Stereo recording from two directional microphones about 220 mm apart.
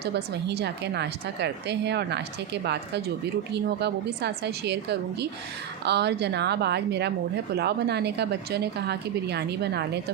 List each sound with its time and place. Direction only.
0.0 s a woman's voice: 50° right (ahead or behind)